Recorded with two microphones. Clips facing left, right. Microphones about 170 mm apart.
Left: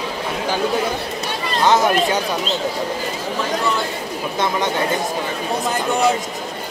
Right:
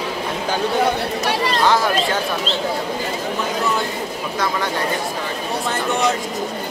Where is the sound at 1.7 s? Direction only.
20° left (ahead or behind).